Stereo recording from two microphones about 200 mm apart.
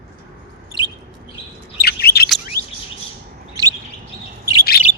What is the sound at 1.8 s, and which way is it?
Bird, 50° left (ahead or behind).